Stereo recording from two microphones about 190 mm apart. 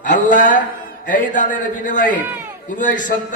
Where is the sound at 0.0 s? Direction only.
45° left (ahead or behind).